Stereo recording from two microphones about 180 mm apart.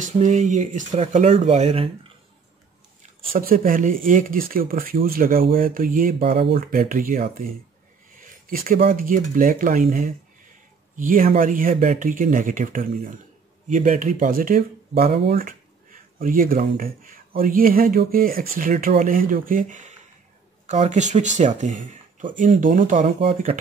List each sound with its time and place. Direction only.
0.0 s speech: 45° right (ahead or behind)
3.0 s speech: 50° right (ahead or behind)
6.3 s speech: 30° right (ahead or behind)
6.6 s speech: 50° right (ahead or behind)